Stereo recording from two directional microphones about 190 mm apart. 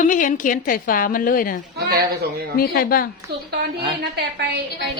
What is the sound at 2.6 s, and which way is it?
Speech, 50° left (ahead or behind).